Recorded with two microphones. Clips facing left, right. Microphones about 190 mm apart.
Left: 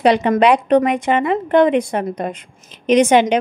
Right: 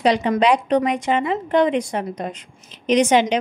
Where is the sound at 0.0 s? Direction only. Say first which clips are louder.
Left 4 dB; 60° left (ahead or behind).